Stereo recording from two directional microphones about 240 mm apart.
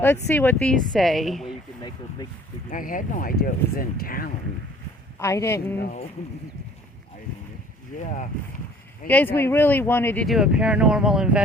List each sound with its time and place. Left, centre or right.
0.3 s speech: centre
2.6 s speech: left
5.2 s speech: centre
5.8 s speech: left
7.9 s speech: left
9.0 s speech: centre